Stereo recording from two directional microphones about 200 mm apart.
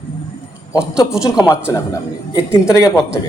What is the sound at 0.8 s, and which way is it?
Speech, 5° right (ahead or behind).